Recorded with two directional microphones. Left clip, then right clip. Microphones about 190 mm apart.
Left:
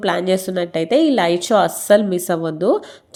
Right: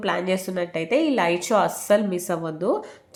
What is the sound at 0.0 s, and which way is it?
Speech, 25° left (ahead or behind).